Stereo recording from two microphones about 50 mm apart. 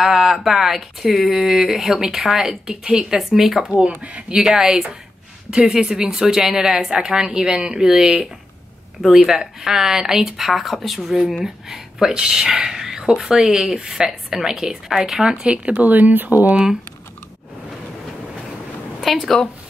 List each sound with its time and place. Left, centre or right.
0.0 s speech: centre
3.2 s speech: centre
4.0 s speech: right
4.5 s speech: centre
15.7 s speech: right
19.2 s speech: centre